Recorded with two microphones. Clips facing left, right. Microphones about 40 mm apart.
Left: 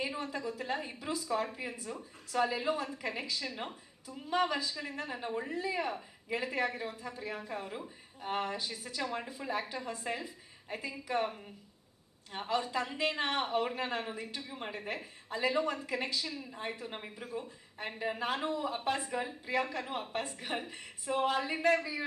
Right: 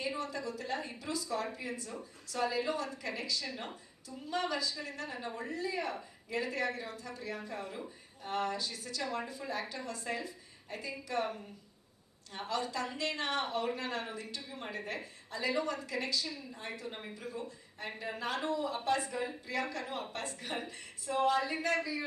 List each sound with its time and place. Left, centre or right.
0.2 s a woman's voice: centre